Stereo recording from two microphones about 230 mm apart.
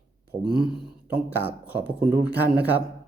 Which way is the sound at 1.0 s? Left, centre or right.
Centre.